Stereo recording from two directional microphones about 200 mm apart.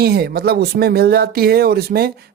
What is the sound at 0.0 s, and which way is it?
Speech, 50° right (ahead or behind).